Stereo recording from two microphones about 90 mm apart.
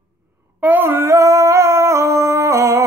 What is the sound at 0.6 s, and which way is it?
Music, 20° right (ahead or behind).